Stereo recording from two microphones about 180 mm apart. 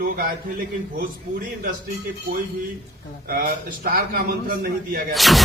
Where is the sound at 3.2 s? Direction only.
55° right (ahead or behind).